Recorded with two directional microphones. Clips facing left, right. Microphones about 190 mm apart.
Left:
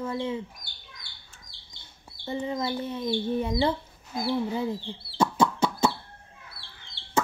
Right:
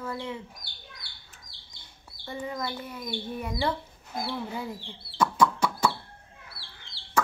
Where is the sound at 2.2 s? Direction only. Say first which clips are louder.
Left 4 dB; 25° left (ahead or behind).